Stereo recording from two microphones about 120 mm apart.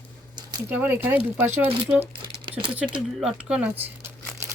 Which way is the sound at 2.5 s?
45° right (ahead or behind).